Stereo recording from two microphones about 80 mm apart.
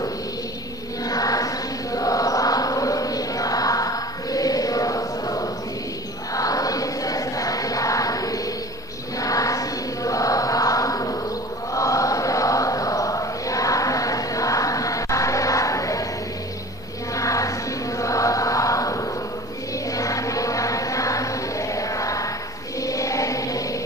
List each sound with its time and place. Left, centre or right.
1.0 s chant: left
6.3 s music: left
9.2 s chant: left
17.1 s mantra: left
19.9 s music: left